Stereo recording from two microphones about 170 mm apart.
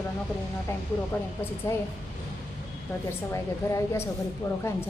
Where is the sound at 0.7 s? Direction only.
15° left (ahead or behind).